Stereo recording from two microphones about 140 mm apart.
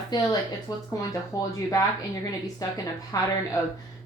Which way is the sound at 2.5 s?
25° left (ahead or behind).